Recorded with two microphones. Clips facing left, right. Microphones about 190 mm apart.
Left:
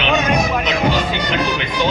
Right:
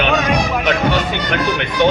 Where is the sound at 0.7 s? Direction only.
60° right (ahead or behind).